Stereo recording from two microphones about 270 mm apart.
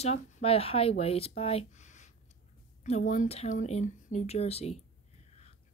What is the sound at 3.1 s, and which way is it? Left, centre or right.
Speech, left.